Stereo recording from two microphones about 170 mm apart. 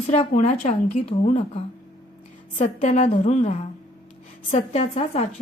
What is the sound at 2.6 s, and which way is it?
A woman's voice, 45° left (ahead or behind).